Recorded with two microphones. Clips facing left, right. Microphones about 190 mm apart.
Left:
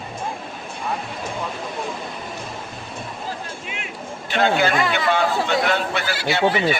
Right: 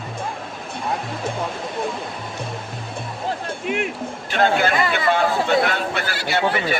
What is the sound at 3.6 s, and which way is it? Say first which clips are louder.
Music: right 11 dB; 55° right (ahead or behind).